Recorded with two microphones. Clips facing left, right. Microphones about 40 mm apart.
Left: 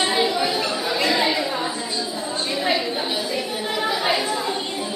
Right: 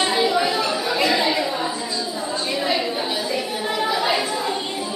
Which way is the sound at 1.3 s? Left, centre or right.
Centre.